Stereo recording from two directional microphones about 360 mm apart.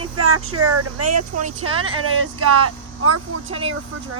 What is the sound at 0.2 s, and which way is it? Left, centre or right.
Speech, right.